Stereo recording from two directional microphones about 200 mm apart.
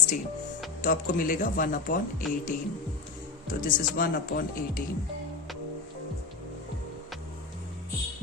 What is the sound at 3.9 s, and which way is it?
Speech, 45° left (ahead or behind).